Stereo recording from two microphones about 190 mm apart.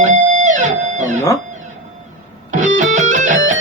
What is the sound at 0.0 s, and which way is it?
Music, 40° right (ahead or behind).